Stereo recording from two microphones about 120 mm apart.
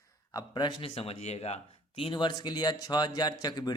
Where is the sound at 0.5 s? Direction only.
40° left (ahead or behind).